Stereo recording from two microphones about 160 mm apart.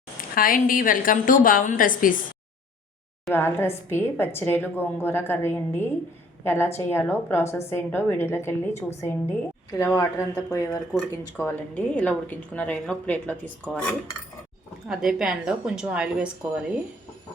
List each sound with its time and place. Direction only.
0.3 s a woman's voice: 60° left (ahead or behind)
3.3 s a woman's voice: 15° left (ahead or behind)
14.8 s a woman's voice: 5° right (ahead or behind)